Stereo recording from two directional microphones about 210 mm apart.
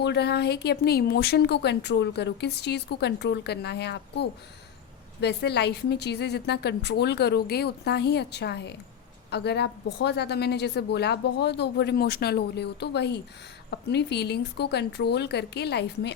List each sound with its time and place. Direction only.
0.0 s speech: 55° left (ahead or behind)